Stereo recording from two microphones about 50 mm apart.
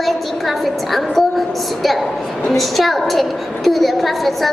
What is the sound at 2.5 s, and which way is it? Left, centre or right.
A woman's voice, centre.